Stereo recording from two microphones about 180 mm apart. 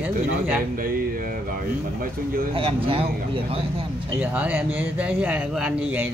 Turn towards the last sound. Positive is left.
turn(degrees=-5)  # may be behind; listen again after turning